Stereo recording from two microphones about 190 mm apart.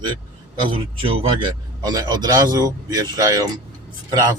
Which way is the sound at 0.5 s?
30° right (ahead or behind).